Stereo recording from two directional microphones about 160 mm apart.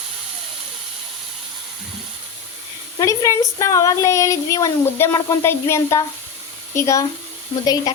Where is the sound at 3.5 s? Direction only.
20° left (ahead or behind).